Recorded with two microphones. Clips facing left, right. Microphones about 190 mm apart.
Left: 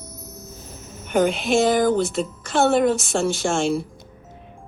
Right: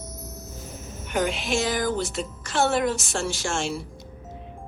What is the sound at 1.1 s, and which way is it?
A woman's voice, 55° left (ahead or behind).